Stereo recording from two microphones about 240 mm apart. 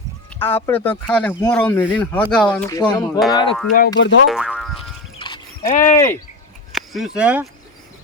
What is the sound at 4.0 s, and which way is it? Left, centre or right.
Speech, left.